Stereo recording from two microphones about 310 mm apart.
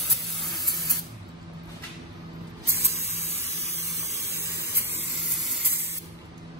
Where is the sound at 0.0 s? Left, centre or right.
Centre.